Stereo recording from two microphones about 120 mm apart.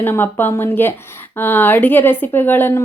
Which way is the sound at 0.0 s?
20° left (ahead or behind).